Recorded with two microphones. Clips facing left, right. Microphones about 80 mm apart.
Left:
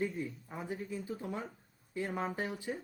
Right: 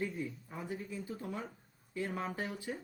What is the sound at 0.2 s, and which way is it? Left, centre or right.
Speech, centre.